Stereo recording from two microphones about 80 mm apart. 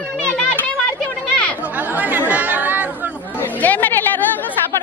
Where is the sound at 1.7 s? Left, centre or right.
Centre.